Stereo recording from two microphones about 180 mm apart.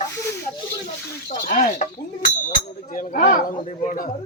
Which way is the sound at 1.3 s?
50° left (ahead or behind).